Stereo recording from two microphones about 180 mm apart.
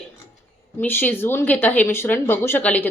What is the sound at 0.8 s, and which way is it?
A woman's voice, 10° left (ahead or behind).